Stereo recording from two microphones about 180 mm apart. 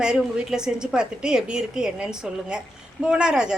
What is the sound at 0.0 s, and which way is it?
A woman's voice, 5° right (ahead or behind).